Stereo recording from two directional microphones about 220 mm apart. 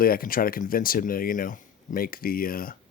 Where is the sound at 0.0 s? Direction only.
40° left (ahead or behind).